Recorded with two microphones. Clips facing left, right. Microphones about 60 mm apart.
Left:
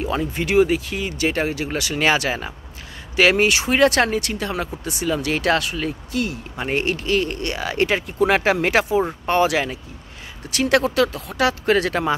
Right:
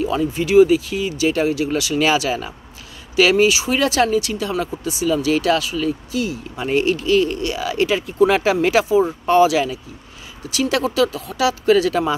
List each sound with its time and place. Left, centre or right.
0.0 s speech: left